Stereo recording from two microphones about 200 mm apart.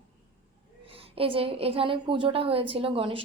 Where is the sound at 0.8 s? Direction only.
30° right (ahead or behind).